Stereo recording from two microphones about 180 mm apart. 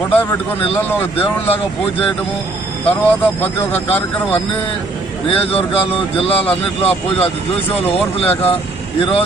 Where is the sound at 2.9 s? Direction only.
10° left (ahead or behind).